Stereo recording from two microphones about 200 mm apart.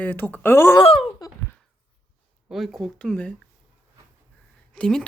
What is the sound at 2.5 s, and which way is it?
Speech, centre (ahead or behind).